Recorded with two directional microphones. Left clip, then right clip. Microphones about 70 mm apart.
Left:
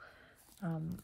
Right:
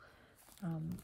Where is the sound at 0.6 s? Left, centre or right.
Centre.